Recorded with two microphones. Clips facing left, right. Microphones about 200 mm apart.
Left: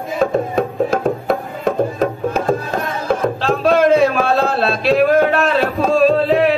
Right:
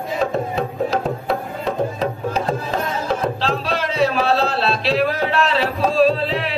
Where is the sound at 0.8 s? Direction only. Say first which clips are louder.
Left 4 dB; 50° left (ahead or behind).